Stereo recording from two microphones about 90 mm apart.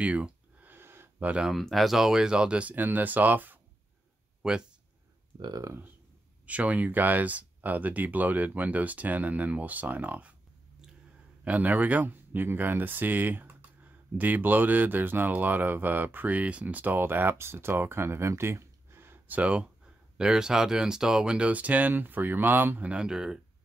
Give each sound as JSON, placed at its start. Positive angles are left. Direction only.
{"t": 0.0, "sound": "a sound", "side_deg": -15}
{"t": 1.2, "sound": "speech", "side_deg": -10}
{"t": 1.5, "sound": "speech", "side_deg": 0}
{"t": 4.4, "sound": "speech", "side_deg": -10}
{"t": 5.4, "sound": "speech", "side_deg": -45}
{"t": 6.4, "sound": "speech", "side_deg": -15}
{"t": 11.4, "sound": "speech", "side_deg": -15}